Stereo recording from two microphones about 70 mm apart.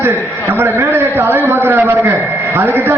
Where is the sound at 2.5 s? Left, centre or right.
Right.